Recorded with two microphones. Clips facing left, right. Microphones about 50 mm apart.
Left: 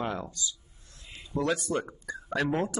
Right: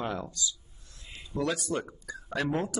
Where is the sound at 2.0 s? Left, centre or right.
Left.